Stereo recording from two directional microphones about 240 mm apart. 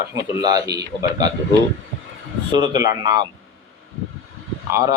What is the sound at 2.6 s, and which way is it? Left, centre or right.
Speech, centre.